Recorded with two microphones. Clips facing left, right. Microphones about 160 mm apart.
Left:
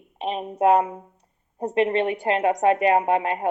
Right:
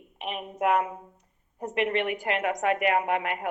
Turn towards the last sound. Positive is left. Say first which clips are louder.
# left 6 dB
turn(degrees=30)  # may be behind; listen again after turning